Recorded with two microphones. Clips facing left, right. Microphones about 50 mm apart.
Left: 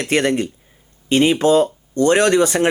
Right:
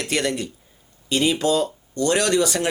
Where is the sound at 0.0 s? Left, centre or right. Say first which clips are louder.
Left 6 dB; left.